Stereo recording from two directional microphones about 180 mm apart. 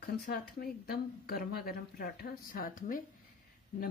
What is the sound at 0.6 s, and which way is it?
Speech, 60° left (ahead or behind).